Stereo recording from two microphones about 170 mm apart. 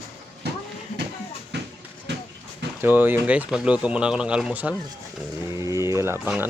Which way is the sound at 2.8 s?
10° right (ahead or behind).